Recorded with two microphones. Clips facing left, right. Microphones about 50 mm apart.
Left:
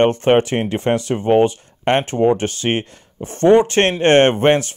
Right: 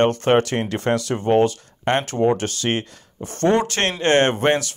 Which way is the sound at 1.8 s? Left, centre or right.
Left.